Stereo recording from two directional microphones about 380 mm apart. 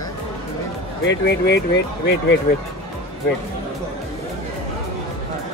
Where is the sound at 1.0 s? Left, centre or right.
Left.